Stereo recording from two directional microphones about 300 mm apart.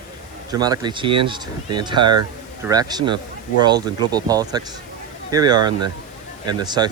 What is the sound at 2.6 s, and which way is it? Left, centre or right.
Speech, centre.